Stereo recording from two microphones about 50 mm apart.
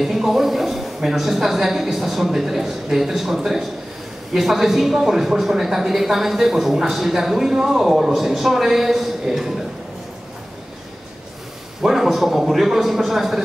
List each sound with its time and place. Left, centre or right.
0.0 s a woman's voice: centre
11.8 s a woman's voice: centre